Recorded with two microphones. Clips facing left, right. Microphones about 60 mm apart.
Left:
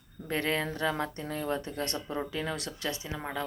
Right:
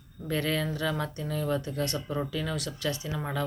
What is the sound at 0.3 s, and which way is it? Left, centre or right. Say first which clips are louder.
Speech: right 1 dB; left.